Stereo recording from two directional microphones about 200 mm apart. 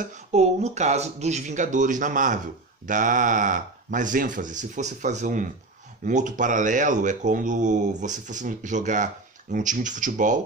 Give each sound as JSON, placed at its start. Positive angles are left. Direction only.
{"t": 0.0, "sound": "speech", "side_deg": -35}